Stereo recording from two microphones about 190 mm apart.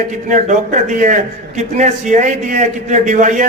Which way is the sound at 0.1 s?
40° right (ahead or behind).